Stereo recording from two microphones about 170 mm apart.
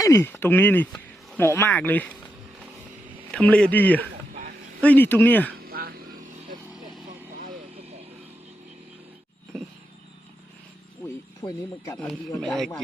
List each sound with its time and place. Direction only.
0.0 s speech: 15° left (ahead or behind)
3.3 s speech: 5° left (ahead or behind)
5.6 s a sound: 65° right (ahead or behind)
7.3 s vehicle: 50° right (ahead or behind)
11.4 s speech: 30° left (ahead or behind)
12.4 s speech: centre (ahead or behind)